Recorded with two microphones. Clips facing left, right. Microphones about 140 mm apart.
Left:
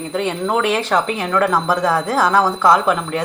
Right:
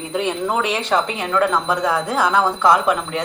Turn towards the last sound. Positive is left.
turn(degrees=0)  # may be behind; listen again after turning